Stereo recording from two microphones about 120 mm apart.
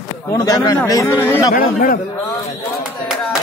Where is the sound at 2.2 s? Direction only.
40° left (ahead or behind).